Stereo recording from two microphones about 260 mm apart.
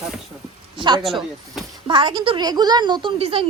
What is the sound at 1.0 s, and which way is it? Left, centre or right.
Speech, centre.